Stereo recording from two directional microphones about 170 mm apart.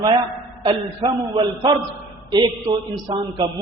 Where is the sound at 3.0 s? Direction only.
25° right (ahead or behind).